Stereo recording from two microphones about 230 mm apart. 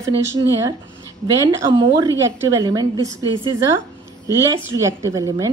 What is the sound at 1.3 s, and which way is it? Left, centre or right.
Speech, centre.